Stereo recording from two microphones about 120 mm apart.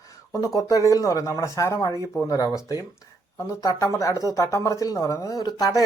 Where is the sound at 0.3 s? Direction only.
30° left (ahead or behind).